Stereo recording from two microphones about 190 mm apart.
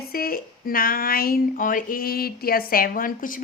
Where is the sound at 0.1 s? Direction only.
50° left (ahead or behind).